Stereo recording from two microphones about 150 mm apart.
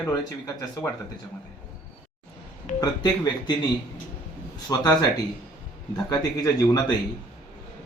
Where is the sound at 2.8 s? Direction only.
25° left (ahead or behind).